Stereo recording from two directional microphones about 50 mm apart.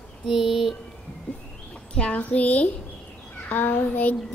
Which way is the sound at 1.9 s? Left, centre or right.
Centre.